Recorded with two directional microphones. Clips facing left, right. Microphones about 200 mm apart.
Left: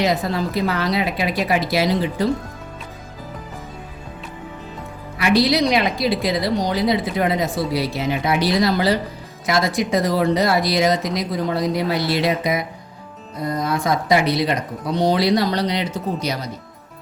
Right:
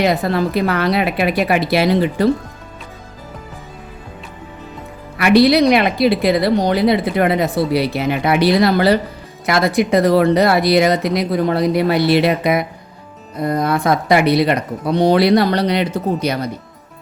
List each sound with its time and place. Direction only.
0.0 s speech: 60° right (ahead or behind)
5.1 s speech: 60° right (ahead or behind)